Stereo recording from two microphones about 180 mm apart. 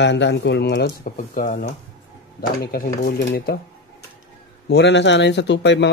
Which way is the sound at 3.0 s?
60° left (ahead or behind).